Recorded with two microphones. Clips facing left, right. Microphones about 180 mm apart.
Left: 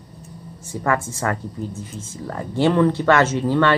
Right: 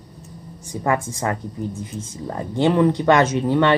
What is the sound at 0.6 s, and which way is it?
A woman's voice, 15° right (ahead or behind).